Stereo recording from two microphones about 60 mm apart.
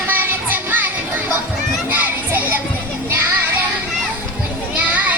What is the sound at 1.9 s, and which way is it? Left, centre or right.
Children playing, right.